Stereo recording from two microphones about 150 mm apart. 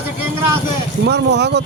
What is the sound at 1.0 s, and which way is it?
Speech, 90° right.